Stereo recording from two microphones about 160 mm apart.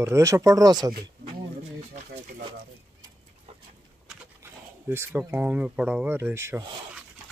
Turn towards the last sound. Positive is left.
turn(degrees=-15)  # may be behind; listen again after turning